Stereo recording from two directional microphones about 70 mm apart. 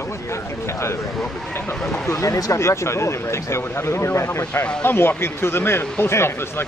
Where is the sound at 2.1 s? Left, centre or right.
Left.